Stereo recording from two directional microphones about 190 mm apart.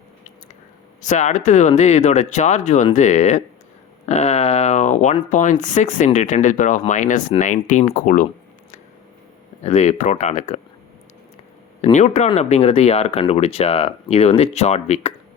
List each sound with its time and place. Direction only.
1.0 s speech: 40° left (ahead or behind)
9.6 s speech: 35° left (ahead or behind)
11.8 s speech: 35° left (ahead or behind)